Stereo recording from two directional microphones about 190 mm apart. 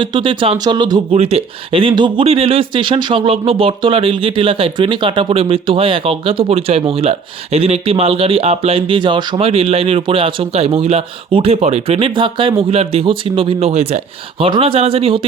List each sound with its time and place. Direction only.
0.0 s speech: 25° right (ahead or behind)